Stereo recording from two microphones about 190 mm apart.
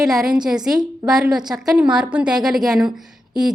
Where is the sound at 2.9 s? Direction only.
5° right (ahead or behind).